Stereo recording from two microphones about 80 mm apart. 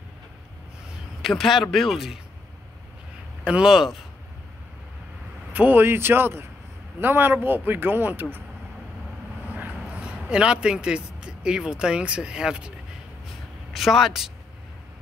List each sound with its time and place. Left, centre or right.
1.2 s speech: centre
3.4 s speech: centre
5.5 s speech: right
9.5 s speech: centre
13.7 s speech: centre